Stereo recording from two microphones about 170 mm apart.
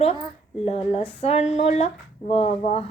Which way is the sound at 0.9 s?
35° left (ahead or behind).